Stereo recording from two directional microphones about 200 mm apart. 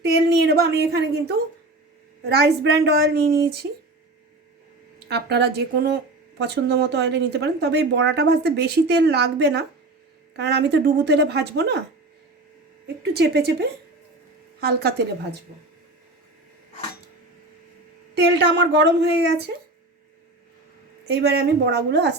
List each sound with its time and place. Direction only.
0.0 s a sound: 55° right (ahead or behind)
0.8 s a woman's voice: 55° right (ahead or behind)
4.9 s a woman's voice: 55° right (ahead or behind)
13.0 s a woman's voice: 55° right (ahead or behind)
18.1 s a woman's voice: 60° right (ahead or behind)
21.1 s a woman's voice: 55° right (ahead or behind)